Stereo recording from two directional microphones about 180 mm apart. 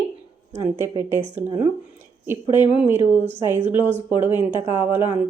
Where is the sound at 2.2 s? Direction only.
10° right (ahead or behind).